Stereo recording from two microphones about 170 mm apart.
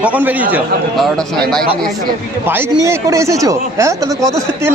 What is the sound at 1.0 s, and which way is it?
Speech, 5° left (ahead or behind).